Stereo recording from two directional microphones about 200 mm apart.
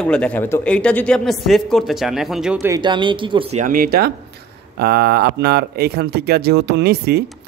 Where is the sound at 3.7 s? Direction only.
45° right (ahead or behind).